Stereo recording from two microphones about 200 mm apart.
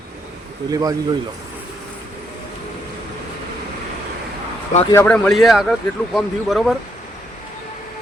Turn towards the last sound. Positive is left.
turn(degrees=0)  # may be behind; listen again after turning